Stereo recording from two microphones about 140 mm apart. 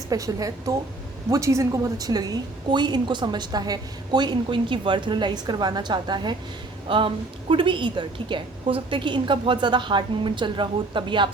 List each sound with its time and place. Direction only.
0.1 s a woman's voice: 25° right (ahead or behind)